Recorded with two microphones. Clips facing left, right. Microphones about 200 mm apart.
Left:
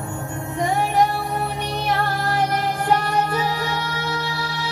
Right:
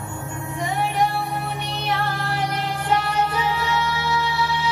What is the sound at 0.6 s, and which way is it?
Music, 45° left (ahead or behind).